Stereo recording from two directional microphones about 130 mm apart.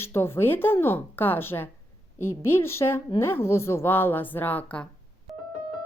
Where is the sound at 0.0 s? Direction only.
20° left (ahead or behind).